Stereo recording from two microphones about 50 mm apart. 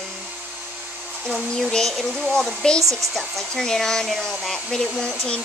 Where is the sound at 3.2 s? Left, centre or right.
Centre.